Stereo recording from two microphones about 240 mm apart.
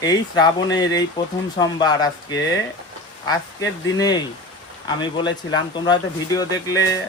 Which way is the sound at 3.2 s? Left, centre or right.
Centre.